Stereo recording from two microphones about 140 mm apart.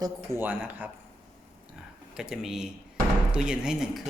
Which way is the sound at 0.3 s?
10° right (ahead or behind).